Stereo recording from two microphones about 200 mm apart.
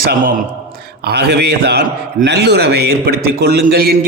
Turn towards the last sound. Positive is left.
turn(degrees=-50)  # may be behind; listen again after turning